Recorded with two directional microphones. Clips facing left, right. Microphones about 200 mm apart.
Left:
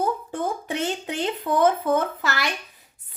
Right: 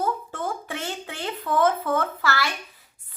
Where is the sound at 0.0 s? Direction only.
15° left (ahead or behind).